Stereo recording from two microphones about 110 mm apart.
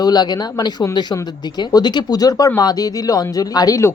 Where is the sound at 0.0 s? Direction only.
40° left (ahead or behind).